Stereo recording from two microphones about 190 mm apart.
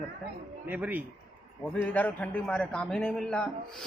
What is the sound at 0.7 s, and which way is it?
Speech, 10° right (ahead or behind).